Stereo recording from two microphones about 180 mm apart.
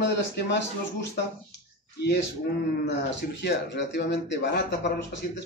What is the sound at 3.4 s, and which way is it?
Speech, 70° left (ahead or behind).